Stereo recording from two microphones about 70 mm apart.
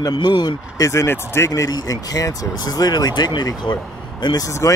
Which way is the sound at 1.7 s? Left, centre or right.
Left.